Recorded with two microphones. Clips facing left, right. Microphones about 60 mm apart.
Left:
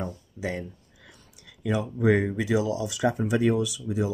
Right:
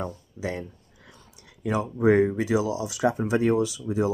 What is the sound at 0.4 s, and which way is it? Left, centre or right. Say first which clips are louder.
Speech: even; right.